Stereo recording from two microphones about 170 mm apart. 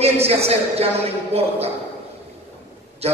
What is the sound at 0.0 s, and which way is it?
A man's voice, 35° right (ahead or behind).